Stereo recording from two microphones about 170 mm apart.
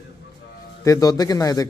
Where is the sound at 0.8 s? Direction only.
20° left (ahead or behind).